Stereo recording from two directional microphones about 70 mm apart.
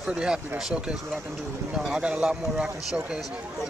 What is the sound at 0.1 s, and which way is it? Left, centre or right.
Speech, centre.